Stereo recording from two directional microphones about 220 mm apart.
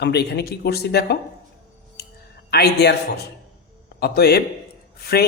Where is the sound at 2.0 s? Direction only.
45° left (ahead or behind).